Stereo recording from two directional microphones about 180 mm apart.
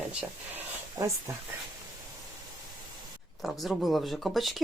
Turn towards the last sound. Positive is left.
turn(degrees=0)  # may be behind; listen again after turning